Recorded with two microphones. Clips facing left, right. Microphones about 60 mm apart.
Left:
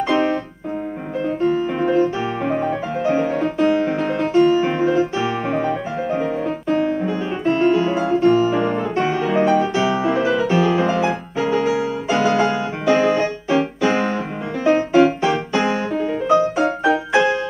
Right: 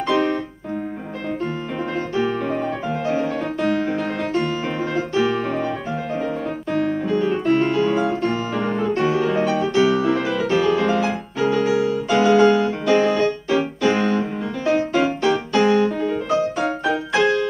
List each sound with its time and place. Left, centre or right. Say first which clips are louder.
0.1 s keyboard: even; centre
1.5 s music: left 7 dB; centre
12.4 s music: right 4 dB; centre
12.9 s music: left 1 dB; centre
14.6 s music: left 5 dB; centre